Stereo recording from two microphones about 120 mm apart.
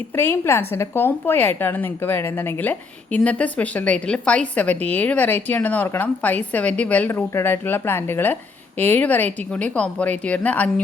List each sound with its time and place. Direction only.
0.2 s a woman's voice: 15° left (ahead or behind)